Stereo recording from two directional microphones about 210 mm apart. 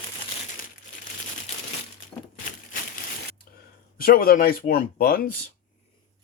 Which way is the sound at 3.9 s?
45° left (ahead or behind).